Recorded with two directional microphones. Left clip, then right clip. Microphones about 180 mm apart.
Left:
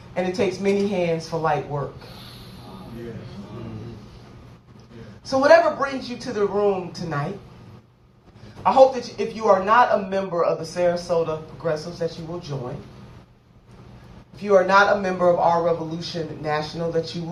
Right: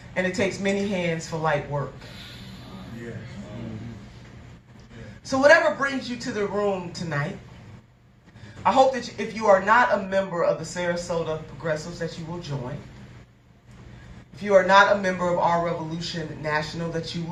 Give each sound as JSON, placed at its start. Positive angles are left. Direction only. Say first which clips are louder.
{"t": 0.1, "sound": "speech", "louder": "left 2 dB", "side_deg": -25}
{"t": 5.2, "sound": "speech", "louder": "left 2 dB", "side_deg": -25}
{"t": 8.6, "sound": "speech", "louder": "left 4 dB", "side_deg": -25}
{"t": 14.3, "sound": "speech", "louder": "even", "side_deg": -25}